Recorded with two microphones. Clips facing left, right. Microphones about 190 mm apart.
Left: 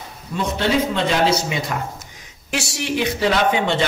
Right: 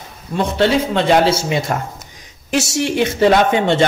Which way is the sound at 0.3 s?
50° right (ahead or behind).